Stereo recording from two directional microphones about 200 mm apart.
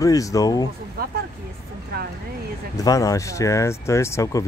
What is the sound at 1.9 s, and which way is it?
Speech, 50° right (ahead or behind).